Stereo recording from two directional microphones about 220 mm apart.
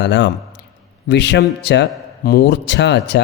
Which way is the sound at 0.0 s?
55° left (ahead or behind).